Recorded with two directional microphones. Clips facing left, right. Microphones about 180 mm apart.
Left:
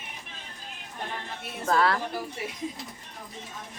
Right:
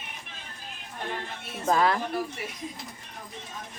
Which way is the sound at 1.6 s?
15° right (ahead or behind).